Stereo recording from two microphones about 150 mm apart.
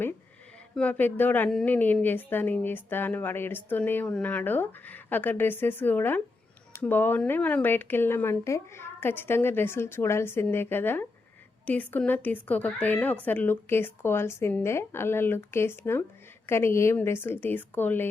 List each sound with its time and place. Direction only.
0.8 s a woman's voice: 10° left (ahead or behind)